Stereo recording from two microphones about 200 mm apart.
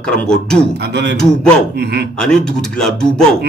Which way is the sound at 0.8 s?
55° right (ahead or behind).